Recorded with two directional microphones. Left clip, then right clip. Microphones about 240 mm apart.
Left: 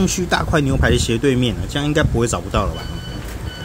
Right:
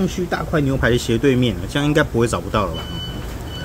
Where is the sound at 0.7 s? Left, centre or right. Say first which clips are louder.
Even; centre.